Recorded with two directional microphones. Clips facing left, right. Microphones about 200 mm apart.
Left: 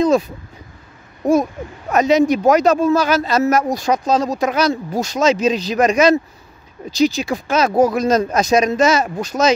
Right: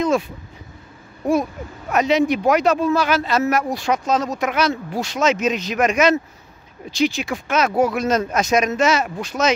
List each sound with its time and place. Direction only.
1.9 s speech: 40° left (ahead or behind)